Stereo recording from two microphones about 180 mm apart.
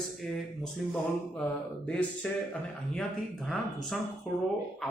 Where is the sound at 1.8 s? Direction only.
5° left (ahead or behind).